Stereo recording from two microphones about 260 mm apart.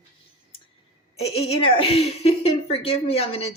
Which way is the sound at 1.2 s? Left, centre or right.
Left.